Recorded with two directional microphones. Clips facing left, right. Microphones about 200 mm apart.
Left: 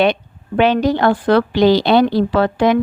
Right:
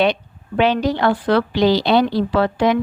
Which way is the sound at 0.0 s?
50° left (ahead or behind).